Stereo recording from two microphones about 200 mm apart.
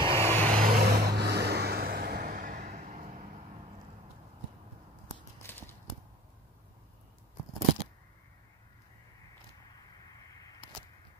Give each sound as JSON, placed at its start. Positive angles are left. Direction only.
{"t": 0.0, "sound": "vehicle", "side_deg": -30}
{"t": 5.4, "sound": "clip-clop", "side_deg": 10}